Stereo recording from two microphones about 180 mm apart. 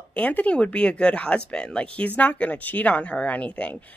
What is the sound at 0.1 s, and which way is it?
A woman's voice, 10° left (ahead or behind).